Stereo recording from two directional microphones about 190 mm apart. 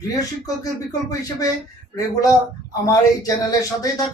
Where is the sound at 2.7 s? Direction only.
20° left (ahead or behind).